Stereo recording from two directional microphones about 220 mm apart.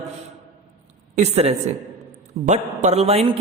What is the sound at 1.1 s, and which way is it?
A woman's voice, 30° right (ahead or behind).